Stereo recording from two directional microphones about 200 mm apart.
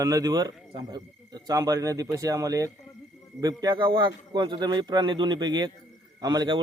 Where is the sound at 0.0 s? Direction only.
20° right (ahead or behind).